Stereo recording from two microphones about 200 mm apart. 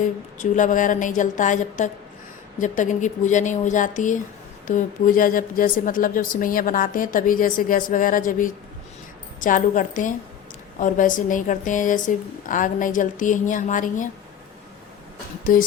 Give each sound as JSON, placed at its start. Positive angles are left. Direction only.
{"t": 0.0, "sound": "a woman's voice", "side_deg": 40}